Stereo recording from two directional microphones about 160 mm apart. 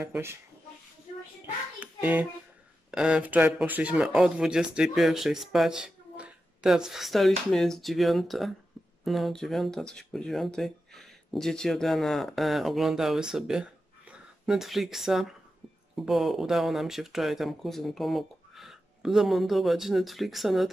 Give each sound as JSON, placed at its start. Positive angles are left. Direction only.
{"t": 0.1, "sound": "speech", "side_deg": -15}
{"t": 1.8, "sound": "hands", "side_deg": -10}
{"t": 2.9, "sound": "speech", "side_deg": -5}